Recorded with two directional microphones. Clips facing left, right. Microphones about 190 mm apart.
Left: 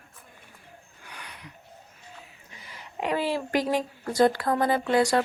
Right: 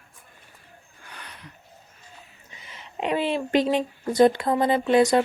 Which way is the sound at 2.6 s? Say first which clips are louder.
Right 2 dB; 20° right (ahead or behind).